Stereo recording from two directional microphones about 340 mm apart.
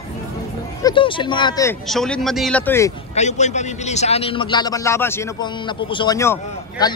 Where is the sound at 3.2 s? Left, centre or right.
Centre.